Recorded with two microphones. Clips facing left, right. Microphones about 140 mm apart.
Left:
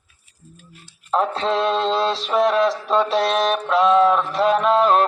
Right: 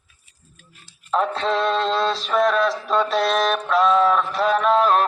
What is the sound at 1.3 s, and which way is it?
Music, 25° left (ahead or behind).